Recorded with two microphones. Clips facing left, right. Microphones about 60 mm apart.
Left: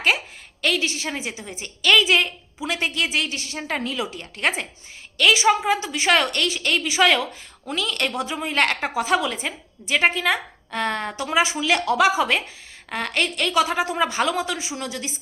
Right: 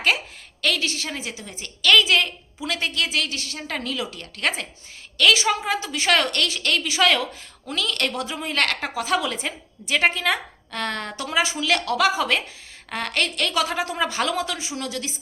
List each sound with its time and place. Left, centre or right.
0.6 s a woman's voice: centre